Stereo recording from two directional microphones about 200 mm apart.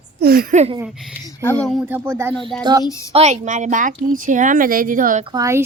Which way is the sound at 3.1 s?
35° right (ahead or behind).